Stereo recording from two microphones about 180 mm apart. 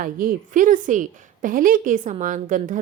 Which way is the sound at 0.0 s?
50° right (ahead or behind).